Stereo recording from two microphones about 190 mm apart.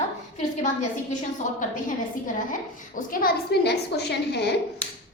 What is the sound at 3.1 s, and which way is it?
A child's voice, 55° left (ahead or behind).